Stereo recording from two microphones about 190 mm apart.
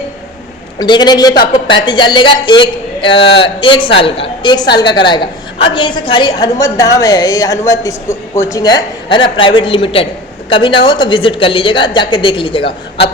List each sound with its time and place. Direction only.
0.8 s a woman's voice: 20° left (ahead or behind)